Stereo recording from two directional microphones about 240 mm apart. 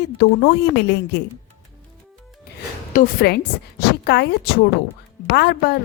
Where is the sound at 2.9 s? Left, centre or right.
Left.